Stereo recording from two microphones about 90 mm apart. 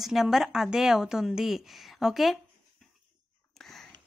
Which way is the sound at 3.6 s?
5° left (ahead or behind).